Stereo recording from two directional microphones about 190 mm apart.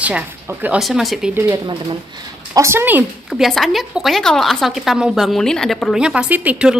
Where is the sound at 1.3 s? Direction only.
20° right (ahead or behind).